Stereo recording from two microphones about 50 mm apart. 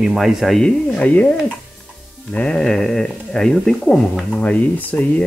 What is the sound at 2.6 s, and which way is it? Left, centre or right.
Speech, centre.